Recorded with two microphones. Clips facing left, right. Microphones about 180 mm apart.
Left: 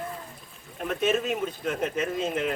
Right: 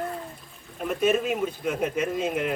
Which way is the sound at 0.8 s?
5° right (ahead or behind).